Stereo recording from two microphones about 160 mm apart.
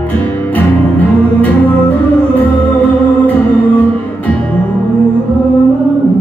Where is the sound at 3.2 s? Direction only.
10° left (ahead or behind).